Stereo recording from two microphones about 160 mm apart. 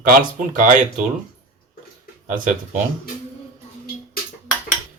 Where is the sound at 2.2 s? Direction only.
55° right (ahead or behind).